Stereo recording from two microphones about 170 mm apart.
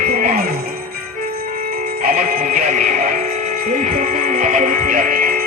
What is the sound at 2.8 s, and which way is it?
Music, 40° right (ahead or behind).